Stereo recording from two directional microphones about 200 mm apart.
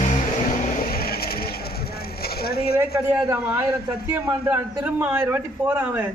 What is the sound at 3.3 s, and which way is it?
A man's voice, 10° right (ahead or behind).